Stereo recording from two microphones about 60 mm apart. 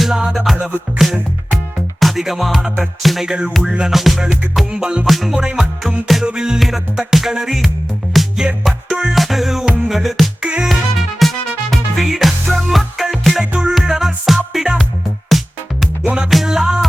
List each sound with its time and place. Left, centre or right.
0.0 s music: centre
4.7 s music: centre
5.0 s music: centre
10.4 s music: centre
11.2 s music: centre
13.4 s music: centre
16.0 s music: centre